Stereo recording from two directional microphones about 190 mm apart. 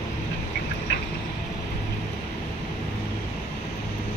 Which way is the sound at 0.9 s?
70° left (ahead or behind).